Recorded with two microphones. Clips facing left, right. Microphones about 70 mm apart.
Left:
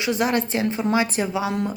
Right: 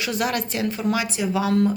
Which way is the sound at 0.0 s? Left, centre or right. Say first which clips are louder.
Left 3 dB; left.